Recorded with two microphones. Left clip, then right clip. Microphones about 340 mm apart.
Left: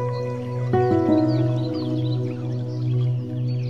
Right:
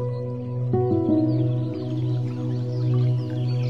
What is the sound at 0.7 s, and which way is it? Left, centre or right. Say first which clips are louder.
Music: left 3 dB; left.